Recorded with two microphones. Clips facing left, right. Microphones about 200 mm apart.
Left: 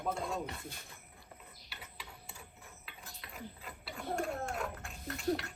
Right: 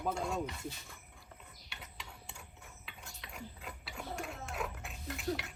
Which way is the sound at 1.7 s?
Centre (ahead or behind).